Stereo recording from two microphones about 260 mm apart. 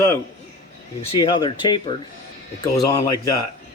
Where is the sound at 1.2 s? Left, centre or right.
Centre.